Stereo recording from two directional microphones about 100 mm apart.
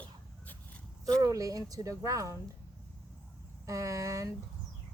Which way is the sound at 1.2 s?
35° right (ahead or behind).